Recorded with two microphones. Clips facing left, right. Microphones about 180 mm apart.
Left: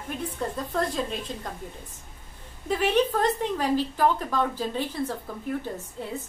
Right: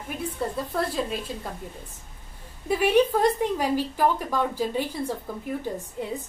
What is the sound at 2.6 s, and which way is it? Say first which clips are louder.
A woman's voice: right 3 dB; 10° right (ahead or behind).